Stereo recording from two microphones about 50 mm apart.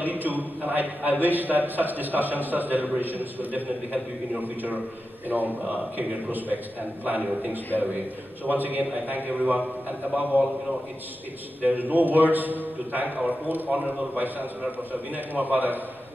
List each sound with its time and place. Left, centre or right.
0.0 s a man's voice: right
5.3 s a man's voice: right
8.5 s a man's voice: right
11.6 s a man's voice: right